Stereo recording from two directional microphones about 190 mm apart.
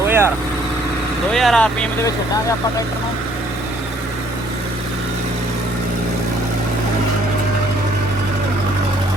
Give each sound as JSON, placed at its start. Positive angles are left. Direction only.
{"t": 0.0, "sound": "vehicle", "side_deg": -15}
{"t": 1.3, "sound": "speech", "side_deg": 0}
{"t": 2.0, "sound": "speech", "side_deg": 20}